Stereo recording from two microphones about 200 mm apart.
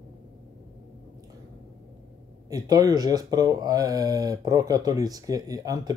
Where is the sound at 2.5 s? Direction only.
20° right (ahead or behind).